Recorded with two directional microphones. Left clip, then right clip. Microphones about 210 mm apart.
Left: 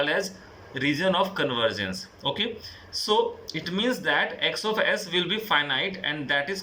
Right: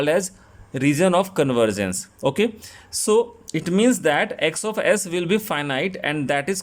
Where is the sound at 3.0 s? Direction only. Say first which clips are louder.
Right 5 dB; 45° right (ahead or behind).